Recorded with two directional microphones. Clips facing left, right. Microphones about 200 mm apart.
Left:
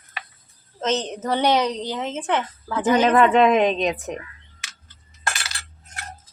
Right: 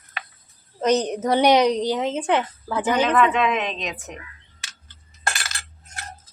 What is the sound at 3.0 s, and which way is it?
A woman's voice, 40° left (ahead or behind).